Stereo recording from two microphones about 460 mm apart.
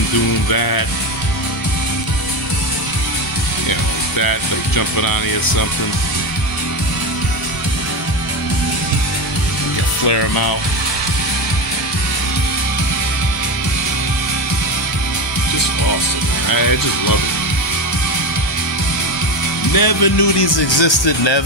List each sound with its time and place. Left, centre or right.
0.5 s speech: left
4.2 s speech: left
10.0 s speech: left
16.4 s speech: left
19.7 s speech: left